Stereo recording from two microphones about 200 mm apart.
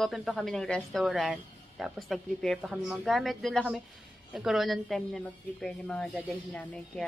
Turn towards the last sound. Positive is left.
turn(degrees=5)  # may be behind; listen again after turning